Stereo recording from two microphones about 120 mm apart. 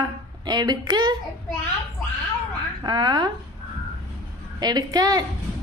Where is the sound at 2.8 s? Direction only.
35° right (ahead or behind).